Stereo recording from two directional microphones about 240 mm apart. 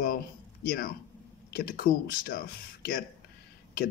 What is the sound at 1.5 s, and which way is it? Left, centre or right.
Speech, left.